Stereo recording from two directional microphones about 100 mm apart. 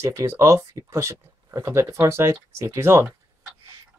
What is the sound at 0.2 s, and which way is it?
Speech, 30° right (ahead or behind).